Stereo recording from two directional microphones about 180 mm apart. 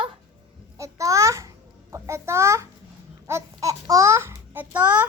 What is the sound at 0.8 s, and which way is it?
Babbling, 15° right (ahead or behind).